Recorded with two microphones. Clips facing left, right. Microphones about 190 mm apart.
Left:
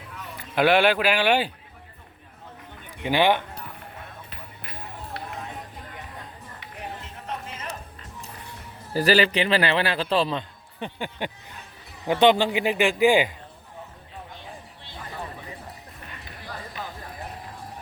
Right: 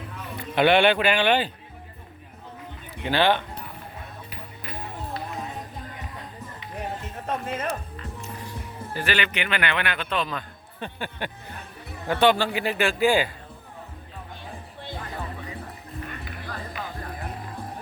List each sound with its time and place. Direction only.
0.5 s speech: 5° left (ahead or behind)
3.0 s a man's voice: 15° left (ahead or behind)
5.2 s a sound: 70° left (ahead or behind)
7.3 s music: 55° right (ahead or behind)
8.9 s a man's voice: 35° left (ahead or behind)
10.8 s a man's voice: 15° left (ahead or behind)